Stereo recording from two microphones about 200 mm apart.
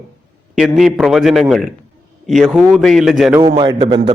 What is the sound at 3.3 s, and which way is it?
Speech, 20° right (ahead or behind).